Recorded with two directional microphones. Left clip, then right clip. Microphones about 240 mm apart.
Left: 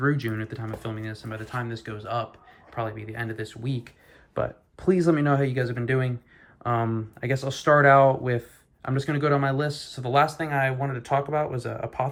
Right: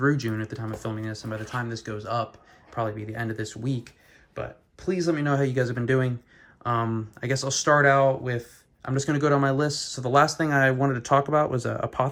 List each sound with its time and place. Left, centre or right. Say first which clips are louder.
0.0 s speech: right 1 dB; centre
4.4 s speech: left 6 dB; centre